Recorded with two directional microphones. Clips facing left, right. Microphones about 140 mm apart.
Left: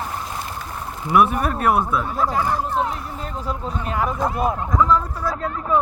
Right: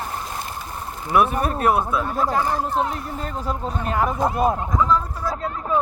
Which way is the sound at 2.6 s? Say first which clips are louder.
Even; 40° right (ahead or behind).